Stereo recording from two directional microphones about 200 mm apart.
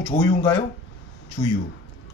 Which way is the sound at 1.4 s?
35° left (ahead or behind).